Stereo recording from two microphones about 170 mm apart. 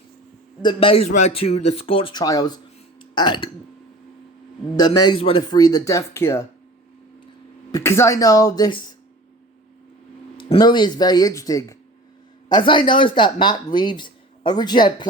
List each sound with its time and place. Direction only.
0.6 s speech: 30° left (ahead or behind)
4.8 s speech: 30° left (ahead or behind)
7.7 s speech: 15° left (ahead or behind)
10.3 s speech: 30° left (ahead or behind)